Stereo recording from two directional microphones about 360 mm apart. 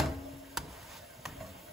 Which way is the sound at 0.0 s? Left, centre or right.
Centre.